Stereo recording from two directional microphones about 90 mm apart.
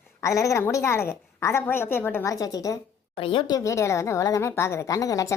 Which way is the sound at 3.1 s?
90° left.